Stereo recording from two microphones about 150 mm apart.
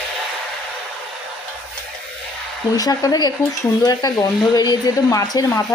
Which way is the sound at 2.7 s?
25° left (ahead or behind).